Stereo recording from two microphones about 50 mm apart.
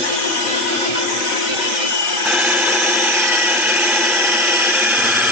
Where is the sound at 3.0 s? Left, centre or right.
Right.